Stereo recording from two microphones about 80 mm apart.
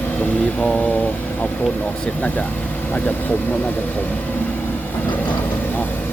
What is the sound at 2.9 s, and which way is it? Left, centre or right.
Speech, centre.